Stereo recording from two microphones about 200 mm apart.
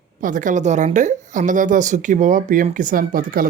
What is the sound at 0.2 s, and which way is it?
A woman's voice, 40° right (ahead or behind).